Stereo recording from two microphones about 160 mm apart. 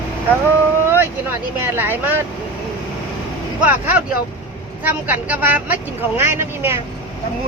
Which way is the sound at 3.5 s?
10° right (ahead or behind).